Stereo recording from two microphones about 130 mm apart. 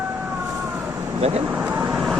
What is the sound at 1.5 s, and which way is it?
Vehicle, 10° right (ahead or behind).